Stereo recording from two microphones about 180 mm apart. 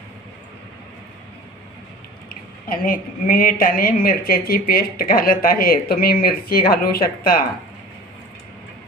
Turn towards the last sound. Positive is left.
turn(degrees=55)  # may be behind; listen again after turning